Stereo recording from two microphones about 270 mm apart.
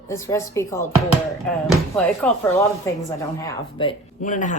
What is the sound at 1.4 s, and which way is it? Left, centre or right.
Speech, centre.